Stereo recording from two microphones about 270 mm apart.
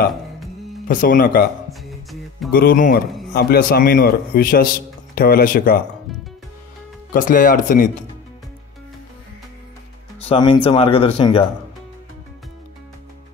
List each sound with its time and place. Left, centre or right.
0.8 s a man's voice: left
1.7 s music: centre
2.5 s a man's voice: left
7.1 s a man's voice: left
10.2 s speech: centre